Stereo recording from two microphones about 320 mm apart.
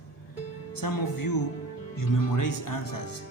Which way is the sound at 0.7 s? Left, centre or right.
Left.